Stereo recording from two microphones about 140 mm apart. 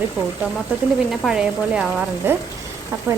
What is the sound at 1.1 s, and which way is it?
Speech, 5° right (ahead or behind).